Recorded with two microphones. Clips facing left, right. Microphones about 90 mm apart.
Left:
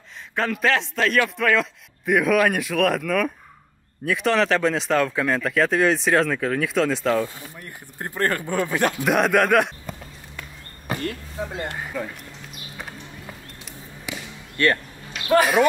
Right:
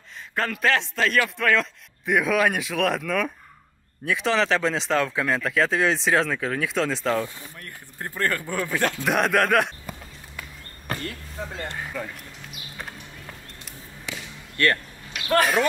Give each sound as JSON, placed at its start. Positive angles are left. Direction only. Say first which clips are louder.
{"t": 0.4, "sound": "speech", "louder": "left 2 dB", "side_deg": 0}
{"t": 8.0, "sound": "speech", "louder": "left 2 dB", "side_deg": 20}
{"t": 9.0, "sound": "a sound", "louder": "left 3 dB", "side_deg": 0}
{"t": 10.9, "sound": "speech", "louder": "left 4 dB", "side_deg": 5}
{"t": 11.9, "sound": "a sound", "louder": "left 3 dB", "side_deg": 5}
{"t": 14.1, "sound": "basketball bounce", "louder": "left 2 dB", "side_deg": 10}
{"t": 14.6, "sound": "speech", "louder": "left 2 dB", "side_deg": 20}
{"t": 15.2, "sound": "speech", "louder": "left 3 dB", "side_deg": 10}